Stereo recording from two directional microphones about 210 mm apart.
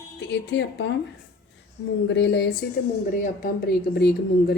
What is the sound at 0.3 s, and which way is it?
Speech, 55° left (ahead or behind).